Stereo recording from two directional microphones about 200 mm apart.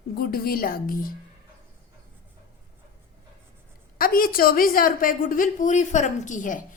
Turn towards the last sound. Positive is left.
turn(degrees=40)  # may be behind; listen again after turning